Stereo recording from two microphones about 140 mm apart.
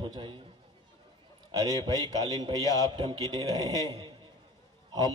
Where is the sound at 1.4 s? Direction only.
25° right (ahead or behind).